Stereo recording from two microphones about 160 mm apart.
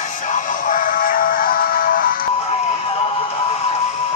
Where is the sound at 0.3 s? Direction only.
55° left (ahead or behind).